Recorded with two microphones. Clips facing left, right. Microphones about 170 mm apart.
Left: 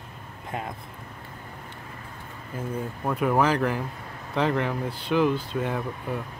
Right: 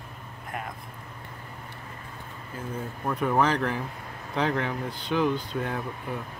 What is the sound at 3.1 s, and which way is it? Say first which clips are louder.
Speech: left 2 dB; 5° left (ahead or behind).